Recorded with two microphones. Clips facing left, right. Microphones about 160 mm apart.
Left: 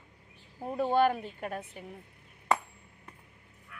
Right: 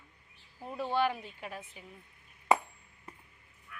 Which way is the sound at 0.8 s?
50° left (ahead or behind).